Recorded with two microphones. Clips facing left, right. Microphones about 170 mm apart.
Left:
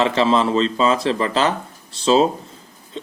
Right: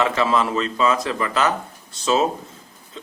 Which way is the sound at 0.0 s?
30° left (ahead or behind).